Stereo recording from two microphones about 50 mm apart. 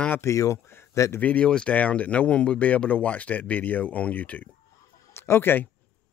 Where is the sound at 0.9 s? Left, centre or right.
Left.